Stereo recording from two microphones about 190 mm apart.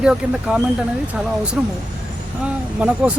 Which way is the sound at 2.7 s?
5° right (ahead or behind).